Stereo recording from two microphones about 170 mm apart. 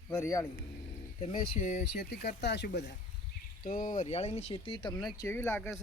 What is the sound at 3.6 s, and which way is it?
Speech, 55° left (ahead or behind).